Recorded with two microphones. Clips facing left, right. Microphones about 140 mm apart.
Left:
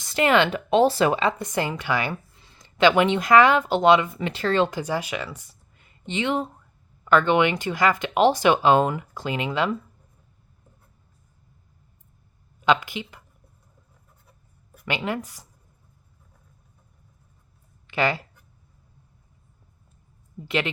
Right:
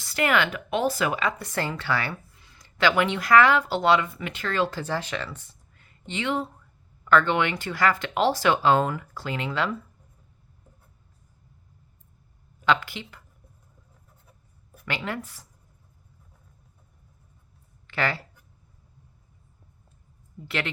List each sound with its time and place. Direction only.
0.0 s speech: 20° left (ahead or behind)
2.3 s speech: 30° left (ahead or behind)
4.3 s speech: 30° left (ahead or behind); by 9.7 s 15° left (ahead or behind)
12.6 s speech: 15° left (ahead or behind)
14.8 s speech: 15° left (ahead or behind)
17.8 s speech: 15° left (ahead or behind)
20.4 s speech: 20° left (ahead or behind)